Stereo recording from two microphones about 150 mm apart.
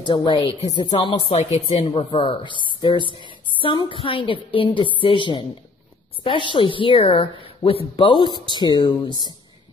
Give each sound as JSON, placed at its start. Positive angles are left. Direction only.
{"t": 0.0, "sound": "a woman's voice", "side_deg": 30}
{"t": 1.3, "sound": "a woman's voice", "side_deg": 50}
{"t": 1.7, "sound": "a woman's voice", "side_deg": 40}